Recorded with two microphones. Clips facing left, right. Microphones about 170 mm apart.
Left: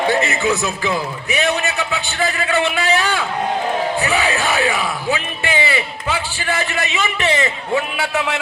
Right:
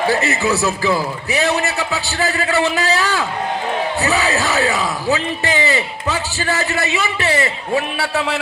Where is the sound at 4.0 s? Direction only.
35° right (ahead or behind).